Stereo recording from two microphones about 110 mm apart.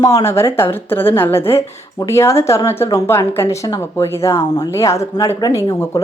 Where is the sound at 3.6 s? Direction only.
35° left (ahead or behind).